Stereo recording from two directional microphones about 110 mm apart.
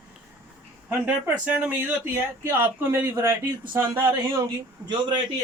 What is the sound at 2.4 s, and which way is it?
Speech, 25° right (ahead or behind).